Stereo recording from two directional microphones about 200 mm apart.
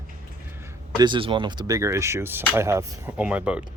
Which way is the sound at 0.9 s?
25° right (ahead or behind).